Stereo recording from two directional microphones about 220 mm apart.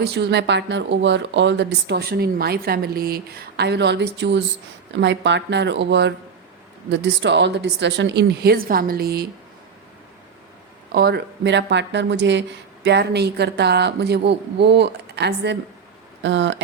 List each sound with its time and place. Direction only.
0.0 s speech: 50° right (ahead or behind)
10.9 s speech: 50° right (ahead or behind)